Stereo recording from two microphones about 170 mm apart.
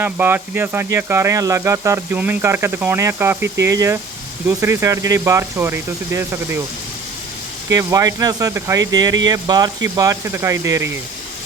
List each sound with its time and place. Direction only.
0.0 s speech: 10° right (ahead or behind)
7.7 s speech: 20° right (ahead or behind)